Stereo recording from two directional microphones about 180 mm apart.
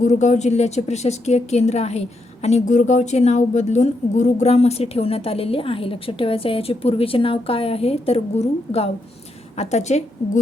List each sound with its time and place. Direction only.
0.0 s a woman's voice: 40° left (ahead or behind)